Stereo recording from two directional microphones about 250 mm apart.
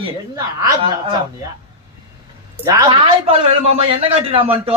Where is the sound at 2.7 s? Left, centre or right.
Centre.